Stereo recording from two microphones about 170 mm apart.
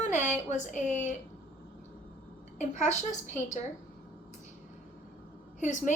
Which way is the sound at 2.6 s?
45° left (ahead or behind).